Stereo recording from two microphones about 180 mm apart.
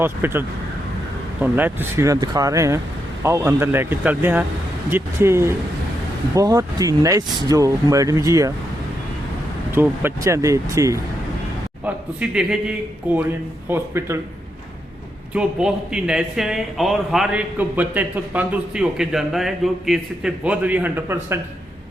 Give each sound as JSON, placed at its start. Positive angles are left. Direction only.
{"t": 0.0, "sound": "speech", "side_deg": -10}
{"t": 9.7, "sound": "speech", "side_deg": -10}
{"t": 12.3, "sound": "speech", "side_deg": -5}
{"t": 15.3, "sound": "speech", "side_deg": -5}